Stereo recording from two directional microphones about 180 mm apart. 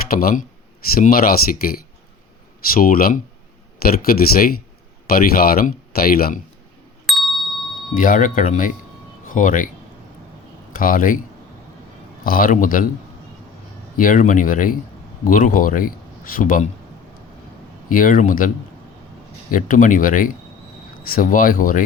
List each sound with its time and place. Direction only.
0.1 s speech: 55° left (ahead or behind)
2.7 s speech: 50° left (ahead or behind)
7.1 s ding: centre (ahead or behind)
7.9 s speech: 50° left (ahead or behind)
10.7 s speech: 50° left (ahead or behind)
12.2 s speech: 50° left (ahead or behind)
13.9 s speech: 50° left (ahead or behind)
17.8 s speech: 50° left (ahead or behind)